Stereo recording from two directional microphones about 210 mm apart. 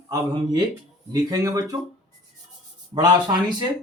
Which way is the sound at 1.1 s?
15° right (ahead or behind).